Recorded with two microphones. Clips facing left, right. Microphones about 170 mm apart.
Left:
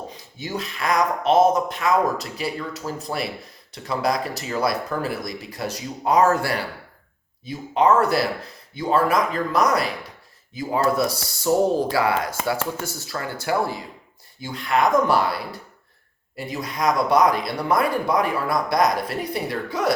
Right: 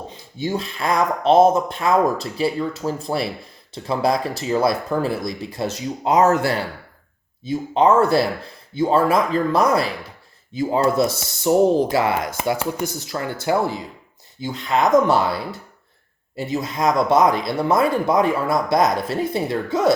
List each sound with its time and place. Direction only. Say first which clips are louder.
0.1 s speech: right 6 dB; 30° right (ahead or behind)